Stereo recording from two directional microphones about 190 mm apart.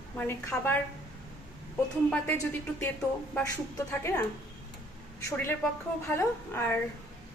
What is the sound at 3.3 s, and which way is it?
Speech, 15° left (ahead or behind).